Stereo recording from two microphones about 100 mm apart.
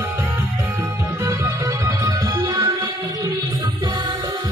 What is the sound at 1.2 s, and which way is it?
Music, 35° right (ahead or behind).